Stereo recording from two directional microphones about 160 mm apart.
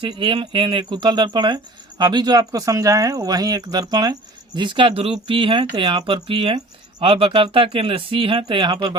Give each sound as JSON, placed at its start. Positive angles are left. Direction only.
{"t": 0.0, "sound": "speech", "side_deg": -30}